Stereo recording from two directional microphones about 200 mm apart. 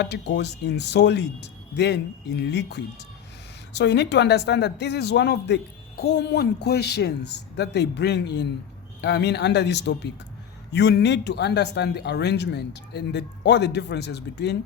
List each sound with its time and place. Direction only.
0.0 s a man's voice: 55° left (ahead or behind)